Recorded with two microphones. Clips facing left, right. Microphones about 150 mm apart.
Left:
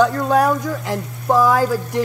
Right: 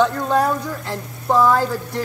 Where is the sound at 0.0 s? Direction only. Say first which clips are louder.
Left 2 dB; 10° left (ahead or behind).